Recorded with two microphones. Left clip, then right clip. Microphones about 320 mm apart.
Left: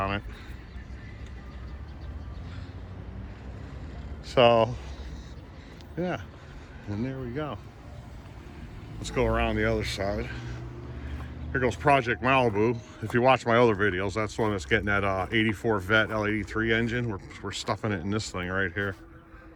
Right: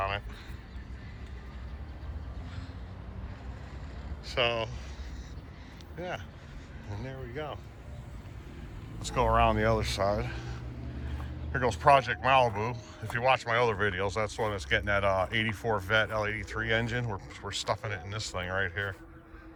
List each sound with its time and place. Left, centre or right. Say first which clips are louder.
4.3 s speech: left 9 dB; centre
6.0 s speech: left 6 dB; centre
9.0 s speech: right 1 dB; centre
11.5 s speech: even; centre